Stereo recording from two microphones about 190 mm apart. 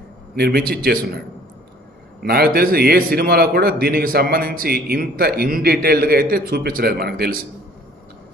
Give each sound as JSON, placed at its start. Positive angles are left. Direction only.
{"t": 0.4, "sound": "a man's voice", "side_deg": -55}
{"t": 2.2, "sound": "a man's voice", "side_deg": -55}